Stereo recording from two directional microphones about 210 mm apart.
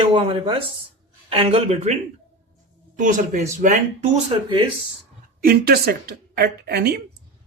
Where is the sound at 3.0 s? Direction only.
40° right (ahead or behind).